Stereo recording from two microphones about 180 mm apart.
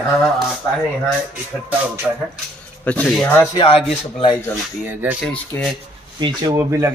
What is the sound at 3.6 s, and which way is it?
Speech, 30° left (ahead or behind).